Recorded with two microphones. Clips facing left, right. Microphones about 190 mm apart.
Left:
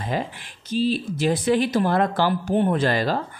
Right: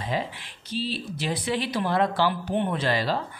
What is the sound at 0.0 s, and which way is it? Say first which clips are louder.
Speech: left 2 dB; 50° left (ahead or behind).